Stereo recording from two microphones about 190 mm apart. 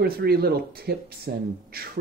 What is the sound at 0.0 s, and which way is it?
Speech, 55° right (ahead or behind).